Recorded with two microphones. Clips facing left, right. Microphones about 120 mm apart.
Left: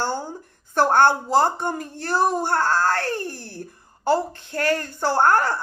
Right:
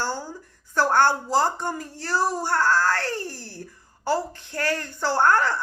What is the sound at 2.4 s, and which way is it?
Speech, 50° left (ahead or behind).